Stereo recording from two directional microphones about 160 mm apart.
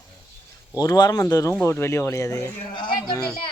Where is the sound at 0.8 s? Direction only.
25° left (ahead or behind).